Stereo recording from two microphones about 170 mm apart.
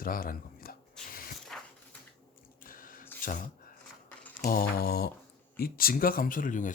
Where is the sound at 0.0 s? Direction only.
60° left (ahead or behind).